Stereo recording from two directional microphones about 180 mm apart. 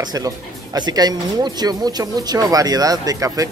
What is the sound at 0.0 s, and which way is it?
Speech, 20° right (ahead or behind).